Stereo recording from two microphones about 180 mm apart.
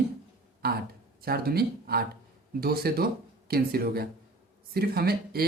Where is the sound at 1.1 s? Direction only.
55° right (ahead or behind).